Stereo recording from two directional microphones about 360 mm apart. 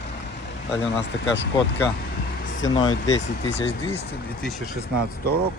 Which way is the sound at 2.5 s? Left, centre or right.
Left.